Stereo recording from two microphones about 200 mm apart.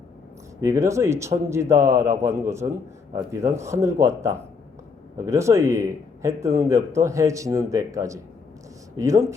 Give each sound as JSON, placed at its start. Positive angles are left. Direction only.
{"t": 0.6, "sound": "speech", "side_deg": -15}